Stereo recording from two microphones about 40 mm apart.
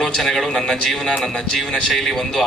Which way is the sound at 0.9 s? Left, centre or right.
Centre.